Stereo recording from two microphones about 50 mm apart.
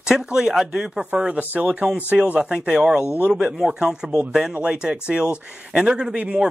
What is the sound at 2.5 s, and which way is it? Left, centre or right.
Speech, centre.